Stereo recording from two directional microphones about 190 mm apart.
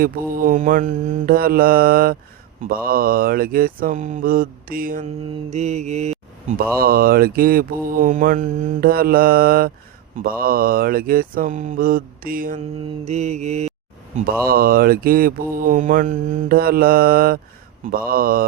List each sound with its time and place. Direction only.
0.0 s mantra: 45° right (ahead or behind)
5.5 s mantra: 35° right (ahead or behind)
6.7 s mantra: 50° right (ahead or behind)
13.1 s mantra: 35° right (ahead or behind)
14.4 s mantra: 50° right (ahead or behind)